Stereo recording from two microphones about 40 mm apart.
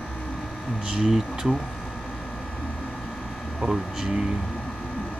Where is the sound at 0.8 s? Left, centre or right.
Centre.